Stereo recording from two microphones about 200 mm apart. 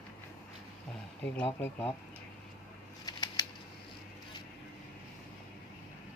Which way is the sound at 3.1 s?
20° left (ahead or behind).